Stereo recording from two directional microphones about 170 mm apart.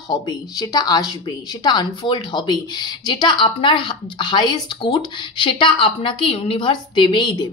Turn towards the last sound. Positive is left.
turn(degrees=25)  # may be behind; listen again after turning